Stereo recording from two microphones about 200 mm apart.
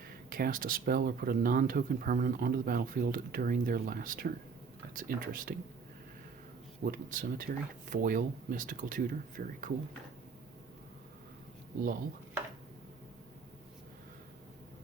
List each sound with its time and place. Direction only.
0.3 s speech: 45° right (ahead or behind)
6.8 s speech: 40° right (ahead or behind)